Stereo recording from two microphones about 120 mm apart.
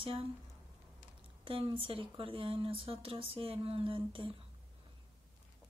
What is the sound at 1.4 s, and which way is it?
Speech, 45° right (ahead or behind).